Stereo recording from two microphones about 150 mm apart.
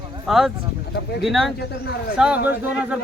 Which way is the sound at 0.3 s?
Centre (ahead or behind).